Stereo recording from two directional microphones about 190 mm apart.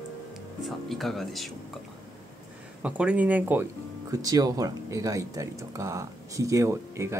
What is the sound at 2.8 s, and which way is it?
Speech, 5° right (ahead or behind).